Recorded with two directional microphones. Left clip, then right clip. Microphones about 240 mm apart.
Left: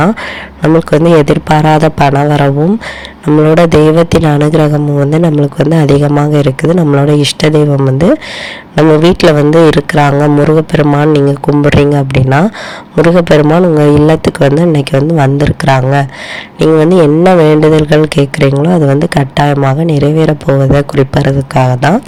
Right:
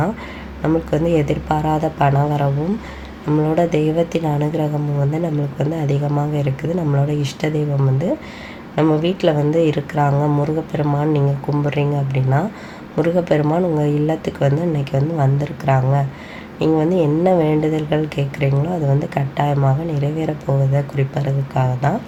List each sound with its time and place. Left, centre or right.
0.6 s speech: left